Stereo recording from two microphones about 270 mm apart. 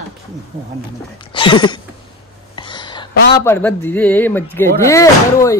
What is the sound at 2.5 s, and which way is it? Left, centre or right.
Whispering, centre.